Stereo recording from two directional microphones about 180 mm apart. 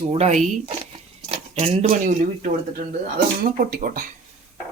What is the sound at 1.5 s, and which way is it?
Speech, 35° right (ahead or behind).